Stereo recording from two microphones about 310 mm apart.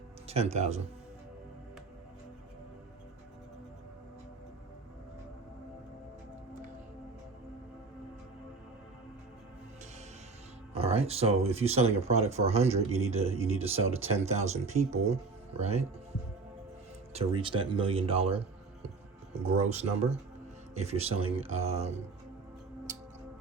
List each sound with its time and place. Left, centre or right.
0.3 s speech: centre
10.8 s speech: centre
17.2 s speech: centre
19.5 s speech: right